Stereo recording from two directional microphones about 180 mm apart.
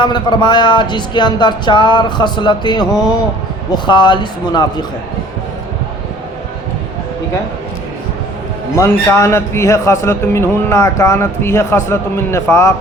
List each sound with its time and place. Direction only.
0.0 s speech: 25° left (ahead or behind)
8.7 s a man's voice: 15° left (ahead or behind)